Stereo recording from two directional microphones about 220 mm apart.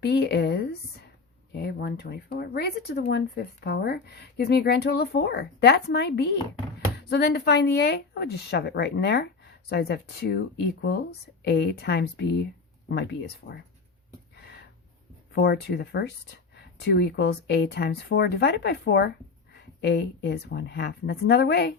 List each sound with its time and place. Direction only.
0.0 s a woman's voice: 50° left (ahead or behind)
14.3 s a sound: 45° left (ahead or behind)
15.4 s a woman's voice: 45° left (ahead or behind)